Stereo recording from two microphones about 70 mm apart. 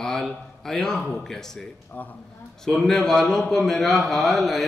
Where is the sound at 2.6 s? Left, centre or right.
Centre.